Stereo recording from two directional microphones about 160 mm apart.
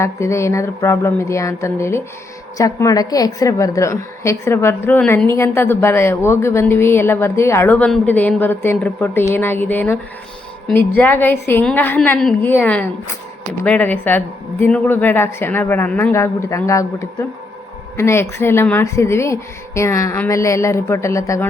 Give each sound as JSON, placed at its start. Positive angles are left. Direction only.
{"t": 0.0, "sound": "a woman's voice", "side_deg": 20}